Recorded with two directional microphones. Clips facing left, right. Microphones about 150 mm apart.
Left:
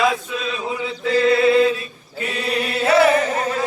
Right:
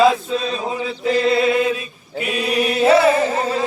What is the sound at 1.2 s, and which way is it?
Mantra, 25° right (ahead or behind).